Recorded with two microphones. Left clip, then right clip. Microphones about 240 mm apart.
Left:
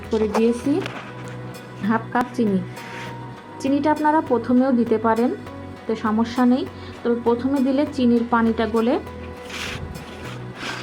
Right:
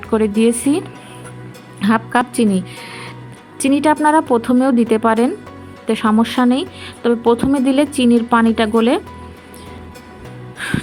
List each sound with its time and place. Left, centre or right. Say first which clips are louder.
0.1 s speech: right 4 dB; right
1.8 s speech: right 6 dB; right
3.6 s speech: right 6 dB; right